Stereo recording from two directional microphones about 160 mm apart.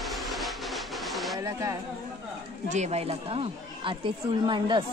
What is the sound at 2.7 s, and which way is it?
Speech, 45° right (ahead or behind).